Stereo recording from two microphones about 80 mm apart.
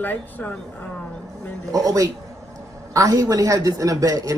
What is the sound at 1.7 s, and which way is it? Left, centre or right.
Speech, right.